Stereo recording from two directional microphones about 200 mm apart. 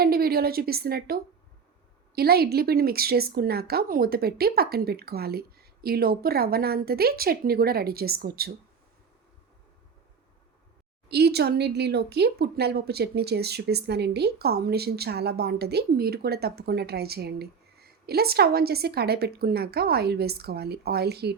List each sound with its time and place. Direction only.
0.0 s a woman's voice: 50° right (ahead or behind)
11.1 s speech: 55° right (ahead or behind)